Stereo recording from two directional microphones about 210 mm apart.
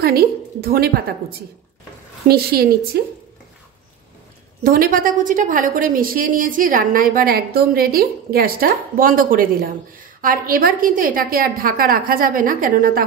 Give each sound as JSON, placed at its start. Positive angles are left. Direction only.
{"t": 0.0, "sound": "a woman's voice", "side_deg": -45}
{"t": 2.2, "sound": "a woman's voice", "side_deg": -45}
{"t": 4.6, "sound": "a woman's voice", "side_deg": -45}